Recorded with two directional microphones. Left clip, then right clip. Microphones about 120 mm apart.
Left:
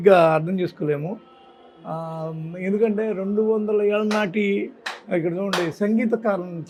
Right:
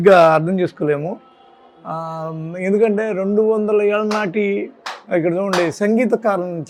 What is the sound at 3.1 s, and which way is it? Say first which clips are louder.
Speech: right 5 dB; 30° right (ahead or behind).